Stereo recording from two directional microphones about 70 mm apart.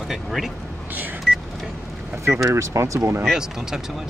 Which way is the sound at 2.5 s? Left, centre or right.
Right.